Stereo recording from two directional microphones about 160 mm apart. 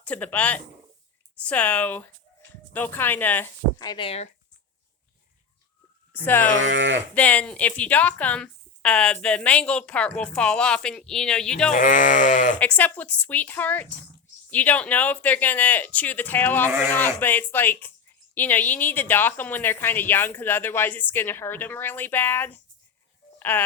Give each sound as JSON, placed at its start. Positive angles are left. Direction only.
{"t": 0.0, "sound": "speech", "side_deg": 10}
{"t": 3.8, "sound": "speech", "side_deg": 30}
{"t": 6.2, "sound": "speech", "side_deg": 10}
{"t": 11.7, "sound": "speech", "side_deg": 55}
{"t": 12.5, "sound": "speech", "side_deg": 10}